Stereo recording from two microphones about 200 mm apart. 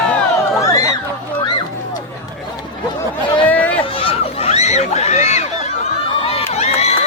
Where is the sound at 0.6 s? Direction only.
15° left (ahead or behind).